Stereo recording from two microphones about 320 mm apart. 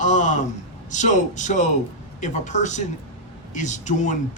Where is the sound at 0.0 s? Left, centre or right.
Left.